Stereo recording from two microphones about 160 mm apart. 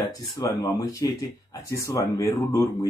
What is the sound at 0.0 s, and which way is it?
Speech, 25° left (ahead or behind).